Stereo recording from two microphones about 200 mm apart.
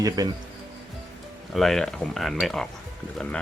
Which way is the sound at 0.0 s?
20° right (ahead or behind).